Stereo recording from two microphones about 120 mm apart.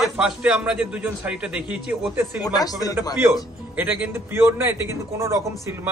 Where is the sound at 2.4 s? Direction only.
30° left (ahead or behind).